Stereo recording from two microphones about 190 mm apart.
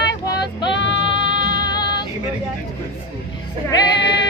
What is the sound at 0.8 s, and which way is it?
Music, 70° left (ahead or behind).